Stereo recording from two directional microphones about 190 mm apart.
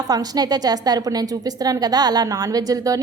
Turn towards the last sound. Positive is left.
turn(degrees=-20)  # may be behind; listen again after turning